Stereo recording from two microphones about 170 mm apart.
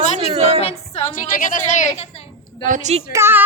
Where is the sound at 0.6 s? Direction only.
35° left (ahead or behind).